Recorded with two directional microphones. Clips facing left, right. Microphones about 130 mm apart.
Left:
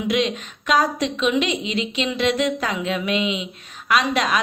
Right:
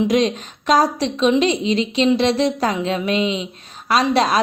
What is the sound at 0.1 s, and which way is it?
A woman's voice, 35° right (ahead or behind).